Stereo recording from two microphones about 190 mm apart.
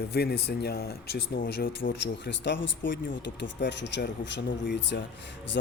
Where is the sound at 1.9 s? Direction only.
65° left (ahead or behind).